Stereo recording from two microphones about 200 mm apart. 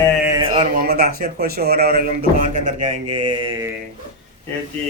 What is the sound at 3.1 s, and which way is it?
Mantra, 20° right (ahead or behind).